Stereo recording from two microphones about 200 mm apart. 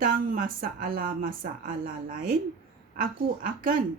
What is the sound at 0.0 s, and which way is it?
A woman's voice, 45° right (ahead or behind).